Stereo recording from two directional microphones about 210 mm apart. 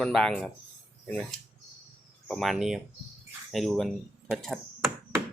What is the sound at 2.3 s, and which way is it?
Speech, centre (ahead or behind).